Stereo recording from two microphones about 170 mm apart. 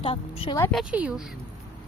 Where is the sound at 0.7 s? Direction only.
5° right (ahead or behind).